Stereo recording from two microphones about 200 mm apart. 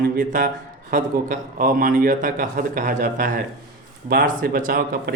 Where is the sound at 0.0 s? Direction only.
45° right (ahead or behind).